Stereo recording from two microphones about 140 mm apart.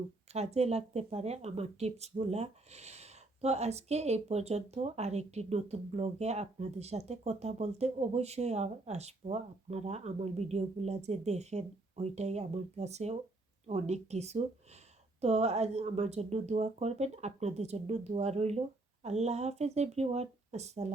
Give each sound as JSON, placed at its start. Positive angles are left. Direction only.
{"t": 0.3, "sound": "speech", "side_deg": -50}